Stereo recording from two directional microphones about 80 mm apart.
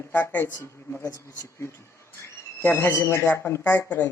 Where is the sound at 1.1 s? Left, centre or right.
Left.